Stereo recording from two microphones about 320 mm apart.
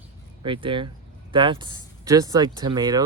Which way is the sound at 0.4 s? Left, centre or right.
Centre.